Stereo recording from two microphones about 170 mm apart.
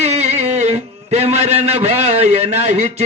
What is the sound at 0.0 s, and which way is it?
A man's voice, 40° right (ahead or behind).